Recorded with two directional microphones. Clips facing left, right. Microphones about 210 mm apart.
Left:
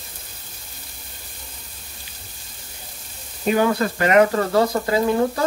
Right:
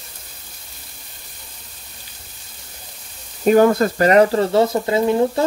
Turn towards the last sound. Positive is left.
turn(degrees=-25)  # may be behind; listen again after turning